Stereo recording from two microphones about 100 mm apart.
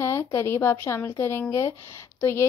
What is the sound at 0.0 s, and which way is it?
Speech, 30° left (ahead or behind).